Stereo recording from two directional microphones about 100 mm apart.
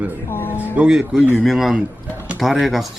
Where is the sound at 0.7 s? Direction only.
10° right (ahead or behind).